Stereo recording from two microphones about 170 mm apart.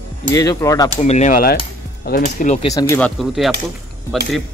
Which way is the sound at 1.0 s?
40° left (ahead or behind).